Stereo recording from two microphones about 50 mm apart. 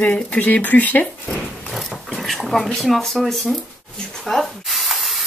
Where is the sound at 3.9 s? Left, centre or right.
Centre.